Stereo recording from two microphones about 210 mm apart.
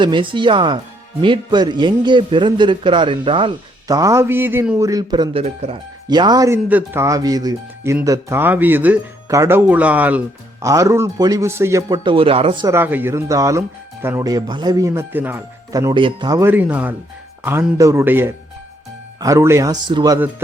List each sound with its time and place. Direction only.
0.0 s a man's voice: 20° right (ahead or behind)
12.7 s speech: 10° right (ahead or behind)